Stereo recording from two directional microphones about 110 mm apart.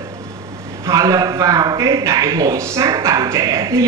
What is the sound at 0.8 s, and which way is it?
A man's voice, 30° right (ahead or behind).